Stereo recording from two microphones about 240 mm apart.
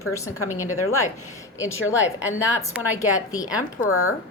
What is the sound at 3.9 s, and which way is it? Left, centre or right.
Speech, left.